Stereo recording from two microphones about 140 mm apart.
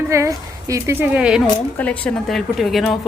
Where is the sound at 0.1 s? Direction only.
20° right (ahead or behind).